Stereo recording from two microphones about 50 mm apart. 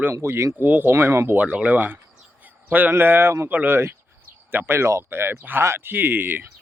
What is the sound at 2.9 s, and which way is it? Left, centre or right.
Speech, right.